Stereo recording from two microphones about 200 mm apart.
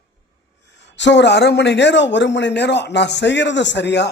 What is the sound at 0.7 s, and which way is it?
A man's voice, 60° left (ahead or behind).